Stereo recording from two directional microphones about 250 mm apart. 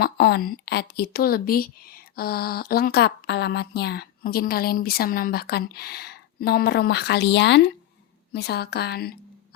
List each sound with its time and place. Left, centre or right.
0.0 s a woman's voice: left